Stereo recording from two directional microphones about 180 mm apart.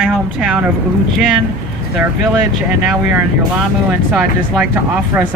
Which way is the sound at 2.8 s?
5° right (ahead or behind).